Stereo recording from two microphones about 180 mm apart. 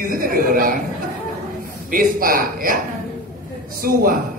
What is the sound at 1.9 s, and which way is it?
Speech, 50° right (ahead or behind).